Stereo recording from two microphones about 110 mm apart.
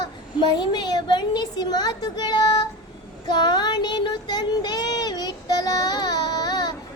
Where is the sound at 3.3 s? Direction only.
40° left (ahead or behind).